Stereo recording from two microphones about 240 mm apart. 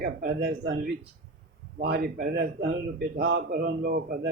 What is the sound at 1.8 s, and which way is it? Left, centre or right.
A man's voice, right.